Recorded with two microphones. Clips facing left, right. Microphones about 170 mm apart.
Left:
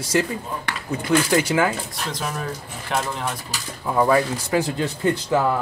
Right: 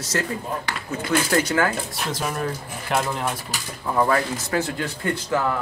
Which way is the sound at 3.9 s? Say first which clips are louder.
Left 2 dB; 10° left (ahead or behind).